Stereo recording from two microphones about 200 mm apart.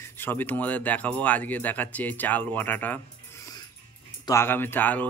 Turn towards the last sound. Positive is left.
turn(degrees=10)  # may be behind; listen again after turning